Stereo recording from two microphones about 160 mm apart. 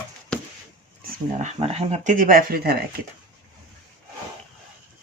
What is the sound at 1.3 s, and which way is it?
Speech, 45° right (ahead or behind).